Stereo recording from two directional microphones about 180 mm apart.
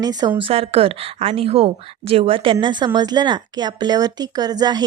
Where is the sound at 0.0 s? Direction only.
20° right (ahead or behind).